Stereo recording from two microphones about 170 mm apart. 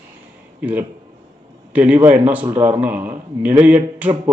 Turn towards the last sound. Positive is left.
turn(degrees=-10)  # may be behind; listen again after turning